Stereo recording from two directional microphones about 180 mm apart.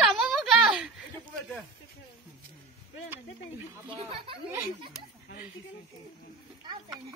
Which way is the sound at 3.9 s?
30° right (ahead or behind).